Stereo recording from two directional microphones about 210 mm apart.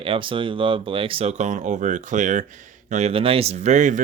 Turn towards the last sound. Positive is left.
turn(degrees=-35)  # may be behind; listen again after turning